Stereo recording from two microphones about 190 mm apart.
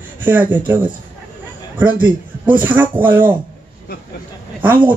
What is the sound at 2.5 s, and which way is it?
Speech, 10° right (ahead or behind).